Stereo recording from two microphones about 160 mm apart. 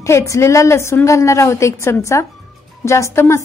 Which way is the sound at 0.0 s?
20° left (ahead or behind).